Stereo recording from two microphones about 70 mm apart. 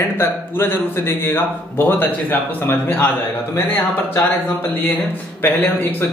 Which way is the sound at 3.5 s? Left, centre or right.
Left.